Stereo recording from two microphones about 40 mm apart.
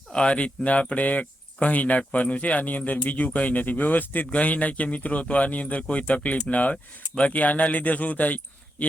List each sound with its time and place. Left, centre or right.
0.1 s speech: left
4.3 s speech: left